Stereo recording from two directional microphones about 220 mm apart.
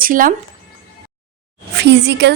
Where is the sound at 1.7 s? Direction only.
50° right (ahead or behind).